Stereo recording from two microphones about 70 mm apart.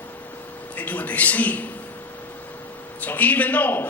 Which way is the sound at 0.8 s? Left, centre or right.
Left.